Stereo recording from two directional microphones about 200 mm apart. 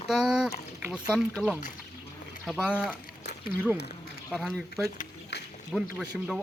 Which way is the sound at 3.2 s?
55° left (ahead or behind).